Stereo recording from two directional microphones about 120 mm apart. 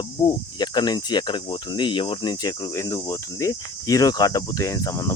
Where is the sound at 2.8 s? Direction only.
25° left (ahead or behind).